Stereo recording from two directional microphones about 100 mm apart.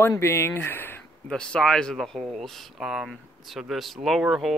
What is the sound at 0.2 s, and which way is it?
Speech, 25° left (ahead or behind).